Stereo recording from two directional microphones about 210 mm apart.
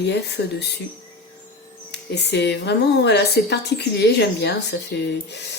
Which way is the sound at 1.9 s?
50° left (ahead or behind).